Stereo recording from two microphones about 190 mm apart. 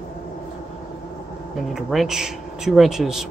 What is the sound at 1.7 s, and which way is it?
Speech, centre (ahead or behind).